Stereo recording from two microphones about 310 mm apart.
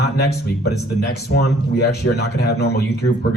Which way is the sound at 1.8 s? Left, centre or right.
Left.